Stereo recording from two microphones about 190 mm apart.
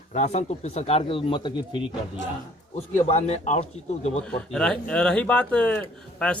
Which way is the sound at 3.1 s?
35° left (ahead or behind).